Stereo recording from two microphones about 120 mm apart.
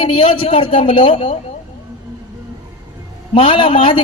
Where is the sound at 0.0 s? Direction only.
45° left (ahead or behind).